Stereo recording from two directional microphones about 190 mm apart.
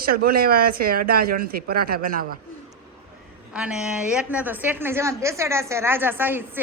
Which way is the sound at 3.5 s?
5° right (ahead or behind).